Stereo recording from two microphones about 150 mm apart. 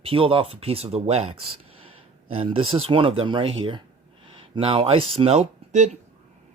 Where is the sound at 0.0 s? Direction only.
40° right (ahead or behind).